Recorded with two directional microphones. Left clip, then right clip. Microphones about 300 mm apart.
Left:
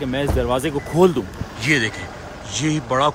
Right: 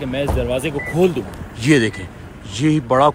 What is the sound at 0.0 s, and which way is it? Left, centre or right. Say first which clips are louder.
Speech: even; centre.